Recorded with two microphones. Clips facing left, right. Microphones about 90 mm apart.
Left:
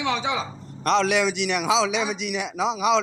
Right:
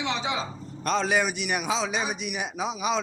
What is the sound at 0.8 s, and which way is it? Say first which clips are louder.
A man's voice: left 4 dB; 75° left (ahead or behind).